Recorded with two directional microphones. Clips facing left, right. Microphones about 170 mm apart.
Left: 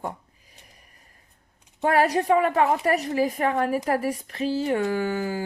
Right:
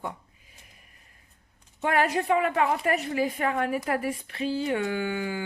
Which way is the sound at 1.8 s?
35° left (ahead or behind).